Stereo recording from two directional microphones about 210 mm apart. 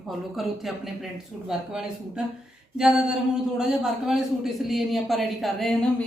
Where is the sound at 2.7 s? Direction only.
5° right (ahead or behind).